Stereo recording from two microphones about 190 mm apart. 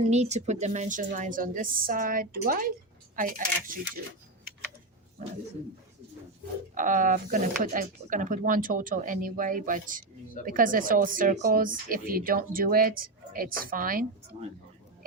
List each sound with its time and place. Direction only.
0.1 s speech: 35° right (ahead or behind)
6.7 s speech: 45° right (ahead or behind)